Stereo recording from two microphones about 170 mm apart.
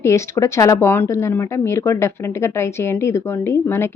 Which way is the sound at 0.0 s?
15° left (ahead or behind).